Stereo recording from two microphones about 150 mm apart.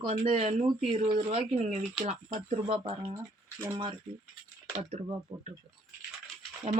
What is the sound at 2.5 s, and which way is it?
Speech, 40° right (ahead or behind).